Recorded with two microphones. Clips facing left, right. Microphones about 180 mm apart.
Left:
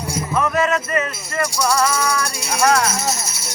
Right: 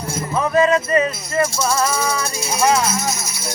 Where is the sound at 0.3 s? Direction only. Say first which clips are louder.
Right 3 dB; 35° right (ahead or behind).